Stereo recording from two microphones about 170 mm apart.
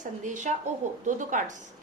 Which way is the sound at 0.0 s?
45° right (ahead or behind).